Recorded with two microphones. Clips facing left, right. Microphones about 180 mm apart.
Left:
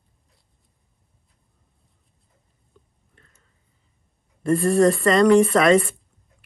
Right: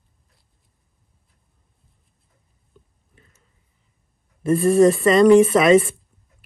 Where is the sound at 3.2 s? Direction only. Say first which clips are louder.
Right 3 dB; 5° right (ahead or behind).